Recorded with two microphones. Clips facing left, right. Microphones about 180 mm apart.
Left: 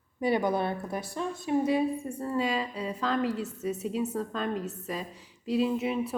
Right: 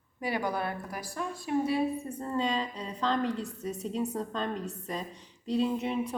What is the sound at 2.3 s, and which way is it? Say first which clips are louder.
A woman's voice: left 1 dB; 5° left (ahead or behind).